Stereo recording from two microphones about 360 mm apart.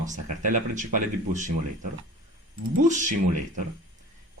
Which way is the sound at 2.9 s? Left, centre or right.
Right.